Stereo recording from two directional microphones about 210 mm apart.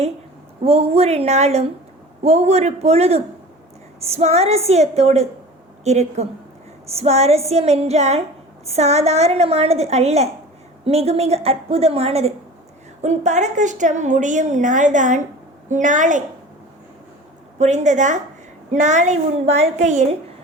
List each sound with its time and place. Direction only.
0.6 s a woman's voice: 30° right (ahead or behind)
17.6 s a woman's voice: 35° right (ahead or behind)